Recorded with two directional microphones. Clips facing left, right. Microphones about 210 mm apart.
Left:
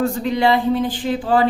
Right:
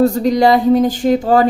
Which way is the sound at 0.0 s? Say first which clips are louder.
Right 6 dB; 40° right (ahead or behind).